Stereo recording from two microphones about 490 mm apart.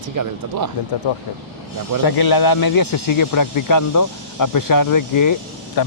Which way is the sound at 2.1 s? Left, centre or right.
Left.